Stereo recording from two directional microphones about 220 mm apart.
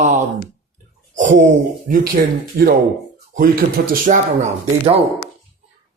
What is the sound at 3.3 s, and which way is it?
Speech, 40° right (ahead or behind).